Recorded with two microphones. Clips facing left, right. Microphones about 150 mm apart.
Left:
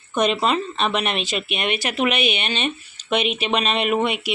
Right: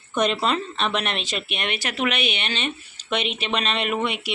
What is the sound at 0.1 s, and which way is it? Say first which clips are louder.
Speech: left 2 dB; 5° left (ahead or behind).